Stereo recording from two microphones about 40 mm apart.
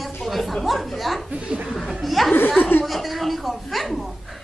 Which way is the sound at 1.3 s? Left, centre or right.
Right.